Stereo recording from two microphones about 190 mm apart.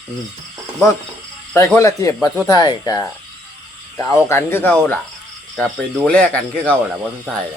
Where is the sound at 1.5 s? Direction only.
15° left (ahead or behind).